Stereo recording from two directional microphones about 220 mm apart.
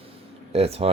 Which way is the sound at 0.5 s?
25° right (ahead or behind).